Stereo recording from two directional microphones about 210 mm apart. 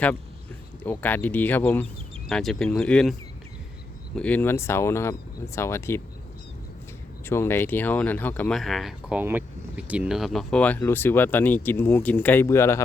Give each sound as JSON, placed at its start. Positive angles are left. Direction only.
{"t": 0.9, "sound": "speech", "side_deg": 10}
{"t": 7.3, "sound": "speech", "side_deg": 10}